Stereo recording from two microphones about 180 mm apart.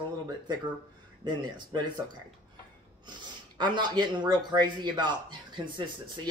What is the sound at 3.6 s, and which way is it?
Speech, 25° right (ahead or behind).